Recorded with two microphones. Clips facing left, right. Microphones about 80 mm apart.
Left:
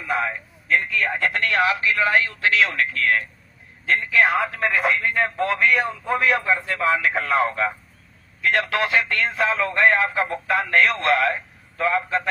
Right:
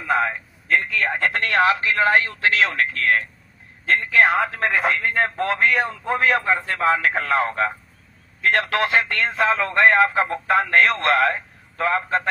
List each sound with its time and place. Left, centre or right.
0.0 s speech: right